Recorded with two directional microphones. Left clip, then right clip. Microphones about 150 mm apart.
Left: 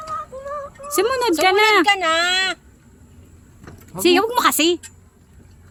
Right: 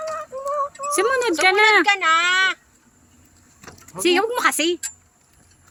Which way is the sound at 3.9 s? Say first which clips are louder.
Left 3 dB; 15° left (ahead or behind).